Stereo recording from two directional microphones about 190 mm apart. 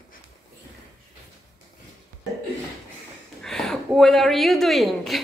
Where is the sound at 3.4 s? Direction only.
Centre (ahead or behind).